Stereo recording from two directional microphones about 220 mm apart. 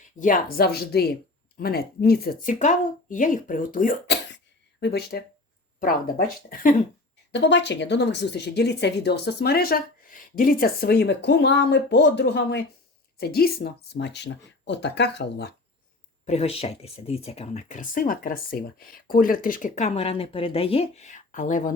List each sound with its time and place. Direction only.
0.2 s speech: 35° left (ahead or behind)
7.3 s speech: 50° left (ahead or behind)
16.2 s speech: 30° left (ahead or behind)